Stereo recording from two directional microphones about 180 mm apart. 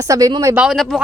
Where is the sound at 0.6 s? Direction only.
Centre (ahead or behind).